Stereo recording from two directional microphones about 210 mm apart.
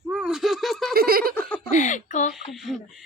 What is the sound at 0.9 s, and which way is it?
Speech, 45° right (ahead or behind).